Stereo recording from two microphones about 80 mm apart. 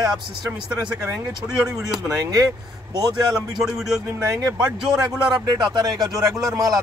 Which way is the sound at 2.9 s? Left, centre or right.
Right.